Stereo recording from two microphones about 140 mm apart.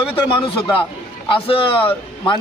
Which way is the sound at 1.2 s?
40° left (ahead or behind).